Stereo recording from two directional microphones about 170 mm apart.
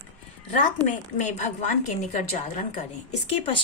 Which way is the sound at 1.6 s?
45° left (ahead or behind).